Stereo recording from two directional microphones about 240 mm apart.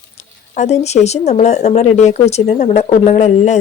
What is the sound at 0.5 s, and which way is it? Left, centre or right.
Speech, left.